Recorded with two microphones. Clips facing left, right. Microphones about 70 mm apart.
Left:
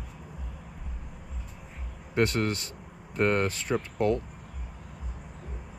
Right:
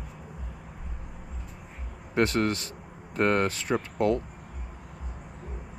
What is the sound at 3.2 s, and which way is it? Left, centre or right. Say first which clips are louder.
Speech: right 1 dB; right.